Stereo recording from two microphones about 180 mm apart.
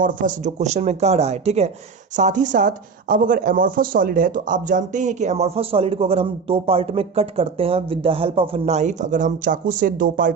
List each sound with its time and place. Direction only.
0.0 s speech: 50° right (ahead or behind)